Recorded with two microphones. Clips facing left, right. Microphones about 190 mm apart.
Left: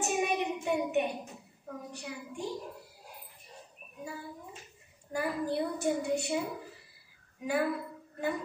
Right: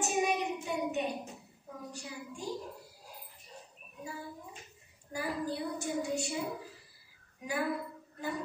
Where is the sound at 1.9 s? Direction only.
60° left (ahead or behind).